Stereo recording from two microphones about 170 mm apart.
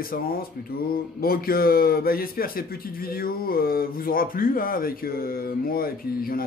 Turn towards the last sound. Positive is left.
turn(degrees=60)  # may be behind; listen again after turning